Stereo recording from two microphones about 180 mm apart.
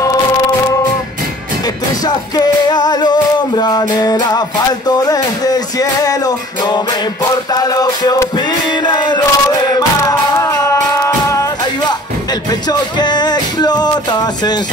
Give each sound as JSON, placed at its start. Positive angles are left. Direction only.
{"t": 2.0, "sound": "music", "side_deg": 20}
{"t": 12.4, "sound": "music", "side_deg": 25}